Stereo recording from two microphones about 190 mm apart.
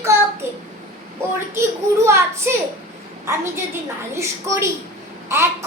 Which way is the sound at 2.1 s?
15° right (ahead or behind).